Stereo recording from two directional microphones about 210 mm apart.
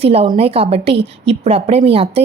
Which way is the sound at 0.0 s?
30° right (ahead or behind).